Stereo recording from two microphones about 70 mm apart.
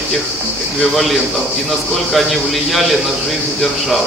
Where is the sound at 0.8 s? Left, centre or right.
Centre.